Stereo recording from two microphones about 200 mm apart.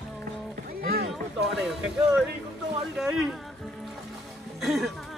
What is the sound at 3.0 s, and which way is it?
Speech, centre (ahead or behind).